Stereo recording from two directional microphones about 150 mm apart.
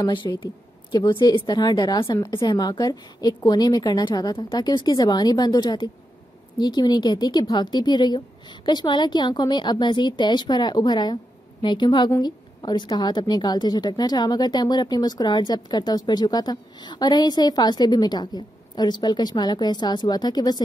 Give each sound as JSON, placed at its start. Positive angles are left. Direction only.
{"t": 0.0, "sound": "a woman's voice", "side_deg": 30}